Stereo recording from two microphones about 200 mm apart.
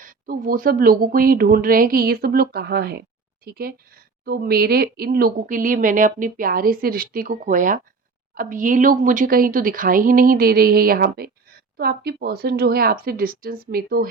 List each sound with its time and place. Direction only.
0.0 s speech: 45° right (ahead or behind)